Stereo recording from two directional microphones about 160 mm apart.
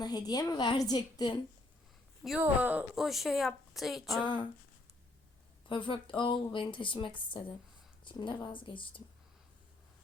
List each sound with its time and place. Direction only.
0.0 s a woman's voice: 25° left (ahead or behind)
2.4 s a woman's voice: 10° right (ahead or behind)
4.2 s a woman's voice: 30° left (ahead or behind)
5.6 s a woman's voice: 30° left (ahead or behind)